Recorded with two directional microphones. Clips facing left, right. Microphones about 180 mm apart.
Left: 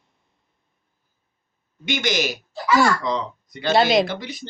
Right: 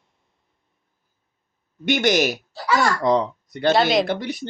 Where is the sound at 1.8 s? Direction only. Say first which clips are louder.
Right 5 dB; 60° right (ahead or behind).